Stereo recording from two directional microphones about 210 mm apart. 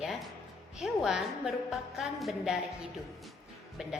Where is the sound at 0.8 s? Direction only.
Centre (ahead or behind).